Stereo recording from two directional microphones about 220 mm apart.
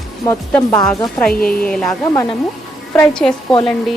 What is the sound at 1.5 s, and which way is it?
Speech, 5° left (ahead or behind).